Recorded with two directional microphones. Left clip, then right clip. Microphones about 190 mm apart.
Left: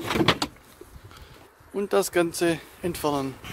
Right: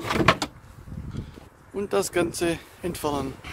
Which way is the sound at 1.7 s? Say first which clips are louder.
Left 2 dB; 20° left (ahead or behind).